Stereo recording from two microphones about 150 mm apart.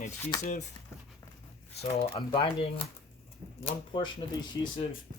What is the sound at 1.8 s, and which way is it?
Speech, 35° left (ahead or behind).